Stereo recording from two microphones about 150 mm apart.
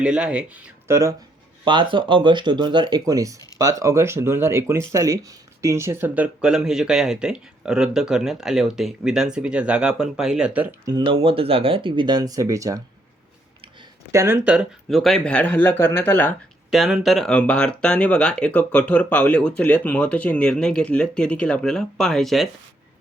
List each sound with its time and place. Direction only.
0.0 s speech: 5° right (ahead or behind)
1.6 s speech: 35° right (ahead or behind); by 10.8 s 10° right (ahead or behind)
10.8 s speech: 30° right (ahead or behind)
14.1 s speech: 15° right (ahead or behind); by 16.3 s 15° left (ahead or behind)
16.7 s speech: centre (ahead or behind)